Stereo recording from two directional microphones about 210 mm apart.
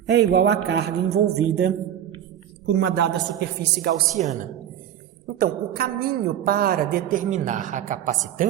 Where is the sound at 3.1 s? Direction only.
50° right (ahead or behind).